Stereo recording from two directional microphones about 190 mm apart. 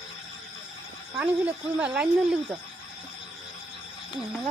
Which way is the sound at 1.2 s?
10° right (ahead or behind).